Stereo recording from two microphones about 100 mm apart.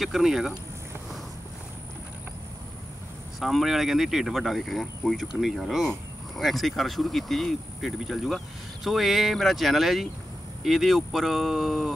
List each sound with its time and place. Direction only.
0.0 s speech: 5° right (ahead or behind)
3.3 s speech: centre (ahead or behind)